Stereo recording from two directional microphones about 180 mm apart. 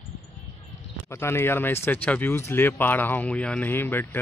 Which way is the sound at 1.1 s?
15° left (ahead or behind).